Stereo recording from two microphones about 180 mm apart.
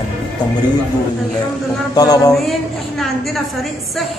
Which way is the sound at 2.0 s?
20° left (ahead or behind).